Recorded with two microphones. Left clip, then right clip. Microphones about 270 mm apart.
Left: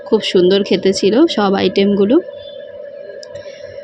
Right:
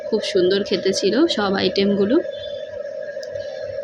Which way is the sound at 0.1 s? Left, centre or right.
Left.